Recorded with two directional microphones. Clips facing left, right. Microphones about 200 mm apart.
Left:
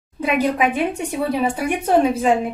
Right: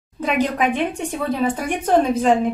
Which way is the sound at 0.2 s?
10° left (ahead or behind).